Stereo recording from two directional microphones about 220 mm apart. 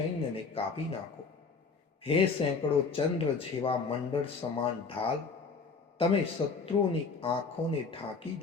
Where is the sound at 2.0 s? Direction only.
25° left (ahead or behind).